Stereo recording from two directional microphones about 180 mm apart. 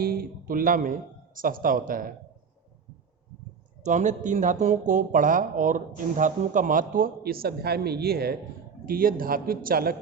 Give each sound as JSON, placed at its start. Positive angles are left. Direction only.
{"t": 0.0, "sound": "speech", "side_deg": -60}
{"t": 3.8, "sound": "speech", "side_deg": -40}